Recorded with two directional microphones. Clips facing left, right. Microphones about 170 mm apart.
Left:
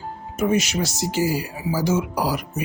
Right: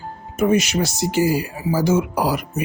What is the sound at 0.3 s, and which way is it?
Speech, 60° right (ahead or behind).